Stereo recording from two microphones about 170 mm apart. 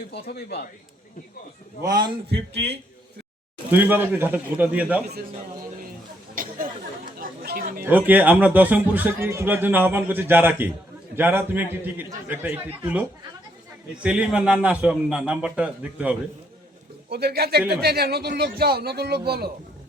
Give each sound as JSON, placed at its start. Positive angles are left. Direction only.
{"t": 0.1, "sound": "speech", "side_deg": 70}
{"t": 1.9, "sound": "a man's voice", "side_deg": -25}
{"t": 3.7, "sound": "a man's voice", "side_deg": -10}
{"t": 6.3, "sound": "chatter", "side_deg": -55}
{"t": 7.9, "sound": "a man's voice", "side_deg": -10}
{"t": 17.1, "sound": "a man's voice", "side_deg": -70}